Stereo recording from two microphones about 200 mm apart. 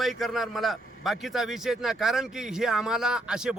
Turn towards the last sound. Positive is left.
turn(degrees=-5)  # may be behind; listen again after turning